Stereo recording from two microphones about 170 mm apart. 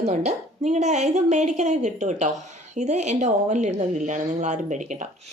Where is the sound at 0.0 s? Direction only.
40° right (ahead or behind).